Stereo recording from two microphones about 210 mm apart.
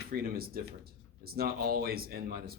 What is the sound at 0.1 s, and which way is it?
A man's voice, 45° right (ahead or behind).